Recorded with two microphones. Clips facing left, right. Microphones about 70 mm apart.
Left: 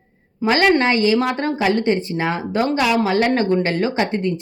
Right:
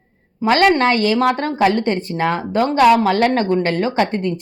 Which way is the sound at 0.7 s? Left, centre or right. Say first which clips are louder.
Right 1 dB; right.